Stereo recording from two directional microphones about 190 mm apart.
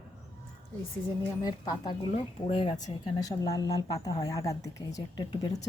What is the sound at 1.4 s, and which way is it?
A woman's voice, 20° left (ahead or behind).